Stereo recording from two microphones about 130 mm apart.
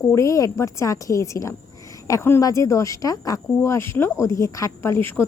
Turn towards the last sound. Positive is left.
turn(degrees=15)  # may be behind; listen again after turning